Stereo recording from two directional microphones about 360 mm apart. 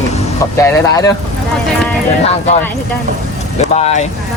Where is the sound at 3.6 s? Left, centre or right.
Centre.